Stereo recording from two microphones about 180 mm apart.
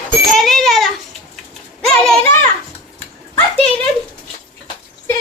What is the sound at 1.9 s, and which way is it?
Children playing, 5° left (ahead or behind).